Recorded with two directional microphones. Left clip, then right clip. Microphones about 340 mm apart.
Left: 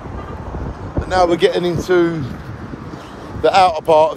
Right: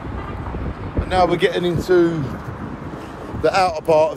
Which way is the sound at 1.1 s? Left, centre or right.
Left.